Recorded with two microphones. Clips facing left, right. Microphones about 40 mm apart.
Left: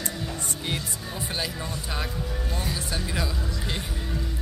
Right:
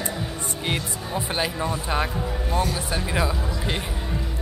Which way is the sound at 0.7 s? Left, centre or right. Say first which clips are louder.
Right 6 dB; right.